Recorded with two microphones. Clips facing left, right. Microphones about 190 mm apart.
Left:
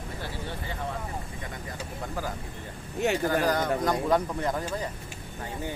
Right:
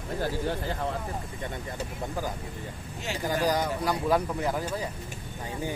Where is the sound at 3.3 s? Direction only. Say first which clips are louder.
Left 1 dB; 10° right (ahead or behind).